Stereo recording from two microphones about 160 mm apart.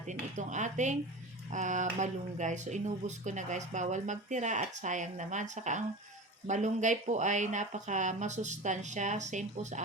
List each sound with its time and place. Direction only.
0.0 s speech: 50° right (ahead or behind)